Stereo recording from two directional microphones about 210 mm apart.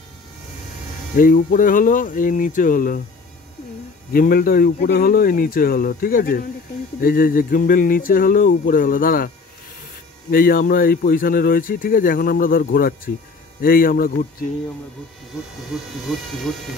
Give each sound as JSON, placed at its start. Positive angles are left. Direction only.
{"t": 1.1, "sound": "speech", "side_deg": 40}
{"t": 4.1, "sound": "speech", "side_deg": 45}
{"t": 10.3, "sound": "speech", "side_deg": 45}
{"t": 15.7, "sound": "speech", "side_deg": 0}